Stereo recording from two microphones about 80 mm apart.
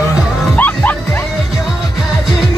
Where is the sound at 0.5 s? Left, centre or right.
Left.